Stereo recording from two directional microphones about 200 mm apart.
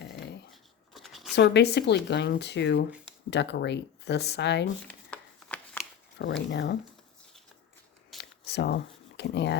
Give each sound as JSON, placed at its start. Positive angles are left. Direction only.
{"t": 0.5, "sound": "shuffling cards", "side_deg": 0}
{"t": 1.4, "sound": "speech", "side_deg": 55}
{"t": 5.1, "sound": "a sound", "side_deg": 5}
{"t": 6.1, "sound": "speech", "side_deg": 60}
{"t": 8.2, "sound": "shuffling cards", "side_deg": 55}